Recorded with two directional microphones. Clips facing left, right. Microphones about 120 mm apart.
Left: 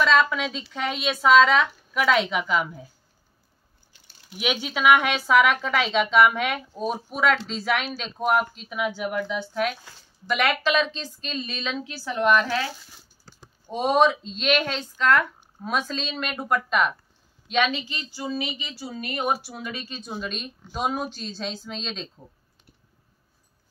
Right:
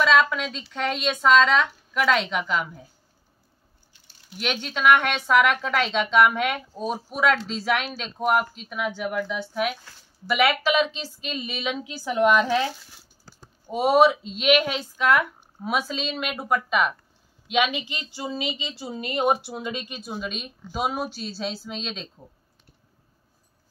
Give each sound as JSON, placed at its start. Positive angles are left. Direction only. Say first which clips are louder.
{"t": 0.0, "sound": "a woman's voice", "louder": "even", "side_deg": 0}
{"t": 4.4, "sound": "a woman's voice", "louder": "left 1 dB", "side_deg": 5}
{"t": 13.7, "sound": "a woman's voice", "louder": "right 2 dB", "side_deg": -10}
{"t": 20.0, "sound": "a woman's voice", "louder": "even", "side_deg": -5}